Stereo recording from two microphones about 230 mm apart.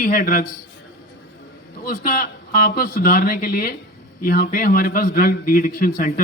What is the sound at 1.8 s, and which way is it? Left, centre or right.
A man's voice, left.